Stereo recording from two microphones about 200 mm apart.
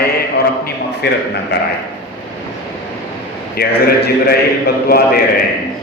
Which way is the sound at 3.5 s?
50° left (ahead or behind).